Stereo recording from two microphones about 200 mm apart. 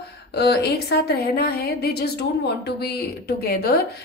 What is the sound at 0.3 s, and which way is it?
A woman's voice, 55° left (ahead or behind).